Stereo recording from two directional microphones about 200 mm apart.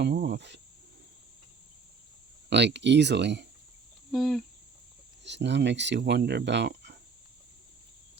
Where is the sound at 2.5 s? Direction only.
60° right (ahead or behind).